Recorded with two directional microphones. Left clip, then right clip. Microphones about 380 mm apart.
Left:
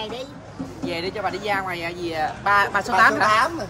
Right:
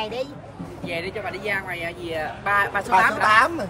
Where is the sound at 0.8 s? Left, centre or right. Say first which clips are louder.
Left 3 dB; centre.